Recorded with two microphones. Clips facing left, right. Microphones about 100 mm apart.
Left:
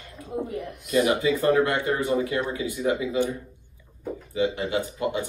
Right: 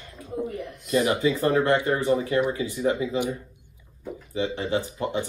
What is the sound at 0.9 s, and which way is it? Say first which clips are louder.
Speech: left 1 dB; 30° right (ahead or behind).